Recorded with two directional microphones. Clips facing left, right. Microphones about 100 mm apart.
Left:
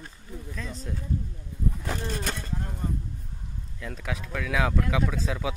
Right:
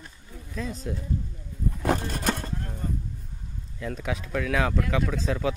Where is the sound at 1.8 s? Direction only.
55° right (ahead or behind).